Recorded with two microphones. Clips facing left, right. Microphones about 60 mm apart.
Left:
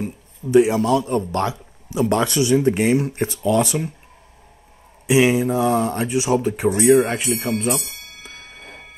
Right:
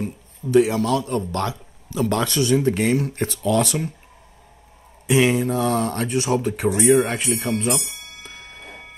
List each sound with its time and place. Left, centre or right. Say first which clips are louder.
0.0 s a man's voice: left 1 dB; centre
5.0 s speech: left 2 dB; centre
6.7 s speech: left 2 dB; centre
8.3 s a sound: even; centre